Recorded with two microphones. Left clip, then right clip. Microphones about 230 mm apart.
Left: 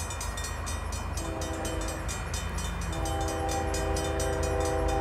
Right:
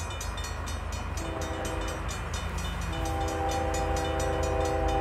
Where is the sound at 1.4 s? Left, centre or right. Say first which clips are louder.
Right 1 dB; left.